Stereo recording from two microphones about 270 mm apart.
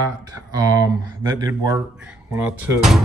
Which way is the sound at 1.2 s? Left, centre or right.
Centre.